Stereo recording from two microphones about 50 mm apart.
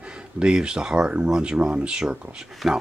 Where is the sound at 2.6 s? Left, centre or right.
Centre.